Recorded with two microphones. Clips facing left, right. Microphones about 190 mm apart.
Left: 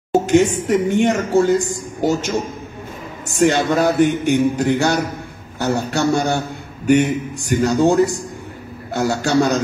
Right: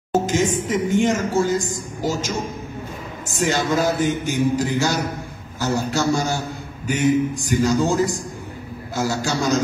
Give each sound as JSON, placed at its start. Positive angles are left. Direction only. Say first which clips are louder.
{"t": 0.1, "sound": "speech", "louder": "left 5 dB", "side_deg": 65}